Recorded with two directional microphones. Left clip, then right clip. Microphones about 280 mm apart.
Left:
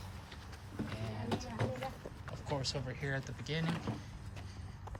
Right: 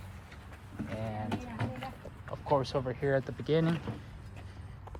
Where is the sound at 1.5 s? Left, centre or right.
Left.